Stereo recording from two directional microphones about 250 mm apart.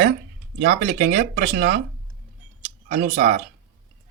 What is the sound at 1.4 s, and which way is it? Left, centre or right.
Speech, right.